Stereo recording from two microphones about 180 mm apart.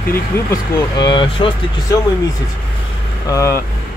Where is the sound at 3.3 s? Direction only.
15° left (ahead or behind).